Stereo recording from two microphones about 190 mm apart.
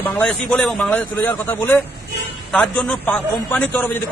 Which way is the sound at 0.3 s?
5° left (ahead or behind).